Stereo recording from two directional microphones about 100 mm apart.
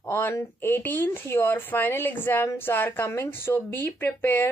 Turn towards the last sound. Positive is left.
turn(degrees=20)  # may be behind; listen again after turning